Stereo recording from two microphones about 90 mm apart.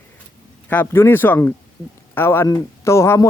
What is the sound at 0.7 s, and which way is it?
Speech, 25° left (ahead or behind).